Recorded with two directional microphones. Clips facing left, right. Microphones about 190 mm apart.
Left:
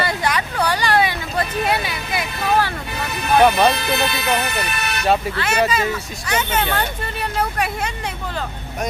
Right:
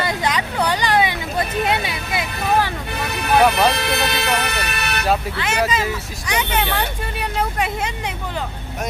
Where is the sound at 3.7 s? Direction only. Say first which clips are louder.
Even; 65° right (ahead or behind).